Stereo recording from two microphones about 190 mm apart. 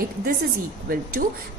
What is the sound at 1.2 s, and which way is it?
Speech, 50° right (ahead or behind).